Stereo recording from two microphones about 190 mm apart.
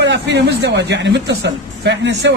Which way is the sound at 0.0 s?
65° right (ahead or behind).